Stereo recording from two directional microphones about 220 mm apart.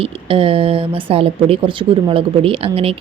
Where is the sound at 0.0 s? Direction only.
25° right (ahead or behind).